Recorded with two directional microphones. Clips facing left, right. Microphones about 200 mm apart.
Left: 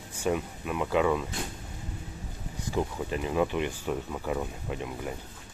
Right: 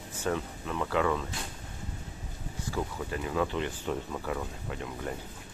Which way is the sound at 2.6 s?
20° left (ahead or behind).